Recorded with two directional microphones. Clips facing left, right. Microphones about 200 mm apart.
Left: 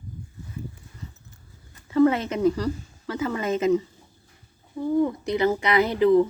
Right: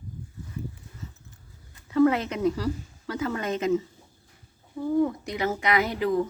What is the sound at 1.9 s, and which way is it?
Speech, centre (ahead or behind).